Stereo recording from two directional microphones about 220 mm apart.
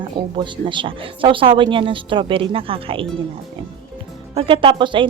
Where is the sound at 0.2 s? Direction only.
20° right (ahead or behind).